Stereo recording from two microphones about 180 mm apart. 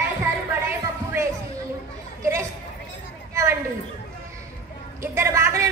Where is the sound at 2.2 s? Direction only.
15° right (ahead or behind).